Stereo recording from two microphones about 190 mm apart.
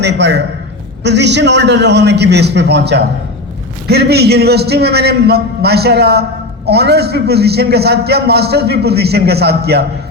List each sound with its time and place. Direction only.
0.0 s a man's voice: 65° right (ahead or behind)